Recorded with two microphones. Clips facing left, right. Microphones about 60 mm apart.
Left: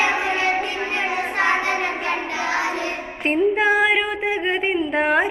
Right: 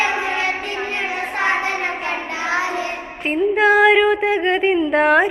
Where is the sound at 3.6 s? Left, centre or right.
Left.